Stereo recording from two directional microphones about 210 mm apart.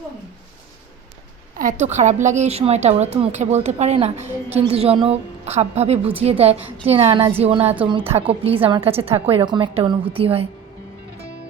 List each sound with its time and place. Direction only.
1.5 s a woman's voice: 35° right (ahead or behind)